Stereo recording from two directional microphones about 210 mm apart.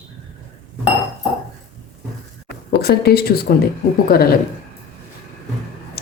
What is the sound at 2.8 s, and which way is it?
Speech, 50° left (ahead or behind).